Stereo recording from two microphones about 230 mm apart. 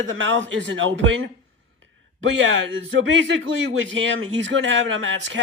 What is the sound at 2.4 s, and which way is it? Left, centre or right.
Speech, right.